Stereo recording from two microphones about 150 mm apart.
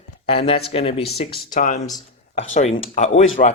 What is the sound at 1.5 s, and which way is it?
Speech, 55° left (ahead or behind).